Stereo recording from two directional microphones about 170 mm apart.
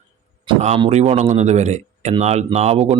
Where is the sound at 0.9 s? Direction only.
40° right (ahead or behind).